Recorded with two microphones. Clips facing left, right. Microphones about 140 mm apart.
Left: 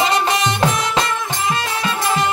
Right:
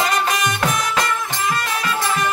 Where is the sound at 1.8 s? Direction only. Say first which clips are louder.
Left 3 dB; 25° left (ahead or behind).